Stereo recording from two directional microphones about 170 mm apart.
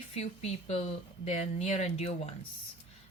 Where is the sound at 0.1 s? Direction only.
40° left (ahead or behind).